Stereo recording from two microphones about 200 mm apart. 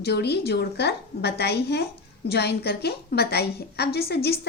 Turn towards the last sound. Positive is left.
turn(degrees=50)  # may be behind; listen again after turning